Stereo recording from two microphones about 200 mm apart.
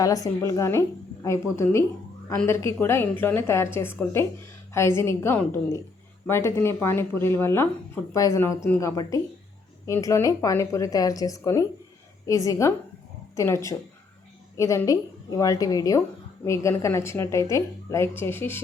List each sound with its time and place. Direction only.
0.0 s a woman's voice: 15° left (ahead or behind)